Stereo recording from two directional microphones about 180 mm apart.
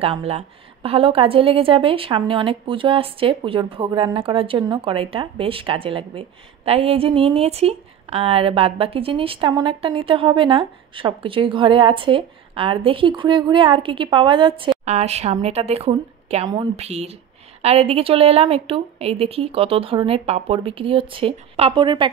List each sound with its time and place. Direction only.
0.0 s a woman's voice: 35° right (ahead or behind)